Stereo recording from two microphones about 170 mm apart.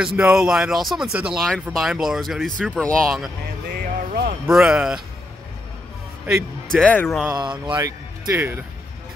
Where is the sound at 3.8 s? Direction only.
60° right (ahead or behind).